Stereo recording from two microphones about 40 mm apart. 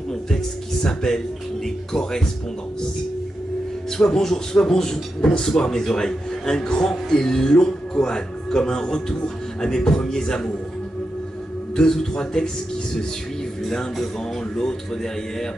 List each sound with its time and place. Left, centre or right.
0.1 s music: centre
1.9 s speech: centre
4.0 s speech: centre
11.7 s speech: centre
14.5 s speech: centre